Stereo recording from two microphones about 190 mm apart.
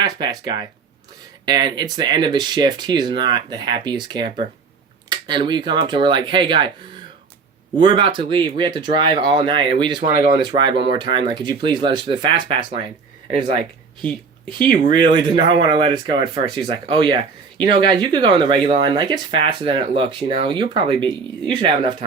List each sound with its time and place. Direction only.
0.0 s speech: 20° right (ahead or behind)
7.8 s speech: 25° right (ahead or behind)